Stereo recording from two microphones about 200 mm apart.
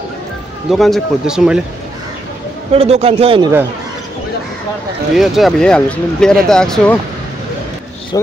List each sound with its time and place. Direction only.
0.7 s speech: centre (ahead or behind)
2.7 s a man's voice: 30° right (ahead or behind)
5.1 s speech: centre (ahead or behind)